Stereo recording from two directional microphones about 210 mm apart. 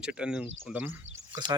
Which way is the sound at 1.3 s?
20° right (ahead or behind).